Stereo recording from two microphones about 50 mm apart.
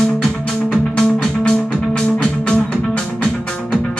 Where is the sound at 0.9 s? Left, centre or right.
Centre.